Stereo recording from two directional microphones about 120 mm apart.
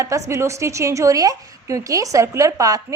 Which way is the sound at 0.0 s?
25° right (ahead or behind).